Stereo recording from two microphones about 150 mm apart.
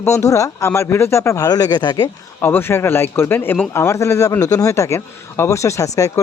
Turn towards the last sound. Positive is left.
turn(degrees=20)  # may be behind; listen again after turning